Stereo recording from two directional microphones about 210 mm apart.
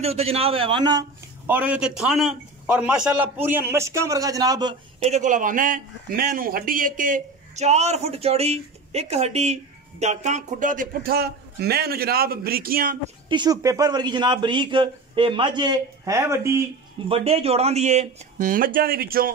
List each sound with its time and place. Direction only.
0.0 s a man's voice: 30° right (ahead or behind)
1.5 s a man's voice: 5° right (ahead or behind)
5.0 s a man's voice: 35° right (ahead or behind)
13.3 s a man's voice: 20° right (ahead or behind)
17.1 s a man's voice: 30° right (ahead or behind); by 19.3 s 45° right (ahead or behind)